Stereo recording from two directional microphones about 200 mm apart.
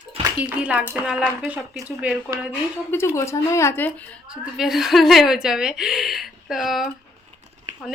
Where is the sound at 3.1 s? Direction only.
15° left (ahead or behind).